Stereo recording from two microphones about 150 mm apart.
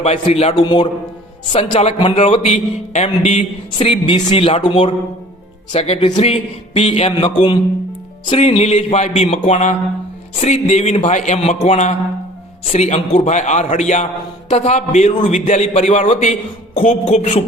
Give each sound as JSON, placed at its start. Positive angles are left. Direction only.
{"t": 0.0, "sound": "a man's voice", "side_deg": 40}
{"t": 8.4, "sound": "a man's voice", "side_deg": 45}